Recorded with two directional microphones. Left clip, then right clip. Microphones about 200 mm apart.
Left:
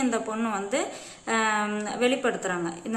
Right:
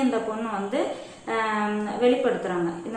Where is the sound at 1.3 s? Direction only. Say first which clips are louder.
Even; 30° left (ahead or behind).